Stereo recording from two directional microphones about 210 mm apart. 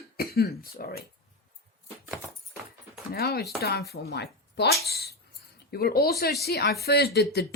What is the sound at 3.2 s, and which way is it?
Speech, 50° left (ahead or behind).